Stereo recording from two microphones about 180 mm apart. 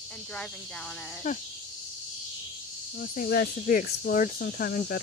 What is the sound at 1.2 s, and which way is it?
Speech, 45° left (ahead or behind).